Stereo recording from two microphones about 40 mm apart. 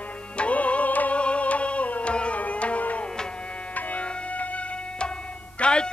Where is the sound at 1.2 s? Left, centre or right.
Left.